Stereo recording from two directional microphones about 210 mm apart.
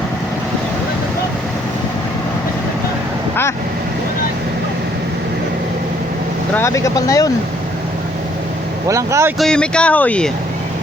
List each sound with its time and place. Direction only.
6.5 s speech: 10° left (ahead or behind)
8.9 s speech: 15° right (ahead or behind)
9.4 s speech: 5° left (ahead or behind)